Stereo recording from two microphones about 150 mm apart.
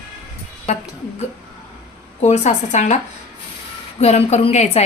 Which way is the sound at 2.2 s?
50° left (ahead or behind).